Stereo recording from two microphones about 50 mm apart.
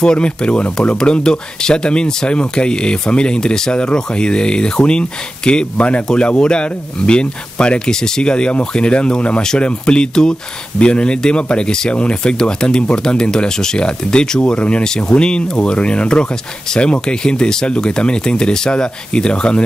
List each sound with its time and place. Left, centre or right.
0.0 s speech: centre